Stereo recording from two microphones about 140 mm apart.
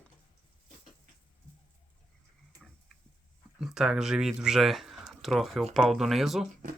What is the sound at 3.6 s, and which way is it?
Speech, 5° right (ahead or behind).